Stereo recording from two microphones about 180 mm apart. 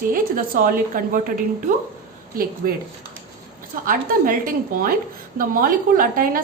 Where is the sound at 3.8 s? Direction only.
50° right (ahead or behind).